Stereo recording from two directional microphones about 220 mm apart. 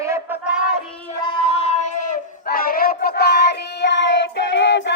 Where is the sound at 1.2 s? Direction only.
25° left (ahead or behind).